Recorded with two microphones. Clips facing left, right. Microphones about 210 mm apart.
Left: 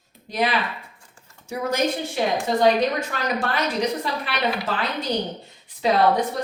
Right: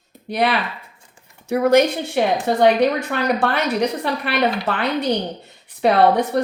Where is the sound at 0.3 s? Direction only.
60° right (ahead or behind).